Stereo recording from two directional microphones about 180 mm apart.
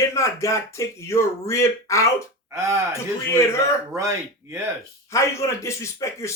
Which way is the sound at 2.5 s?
15° right (ahead or behind).